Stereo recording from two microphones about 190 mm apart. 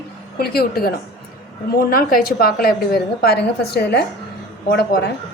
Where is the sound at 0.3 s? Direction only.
55° left (ahead or behind).